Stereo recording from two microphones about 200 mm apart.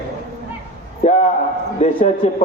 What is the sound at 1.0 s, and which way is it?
A man's voice, 35° left (ahead or behind).